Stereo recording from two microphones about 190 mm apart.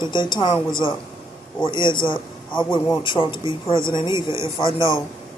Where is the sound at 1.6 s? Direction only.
25° left (ahead or behind).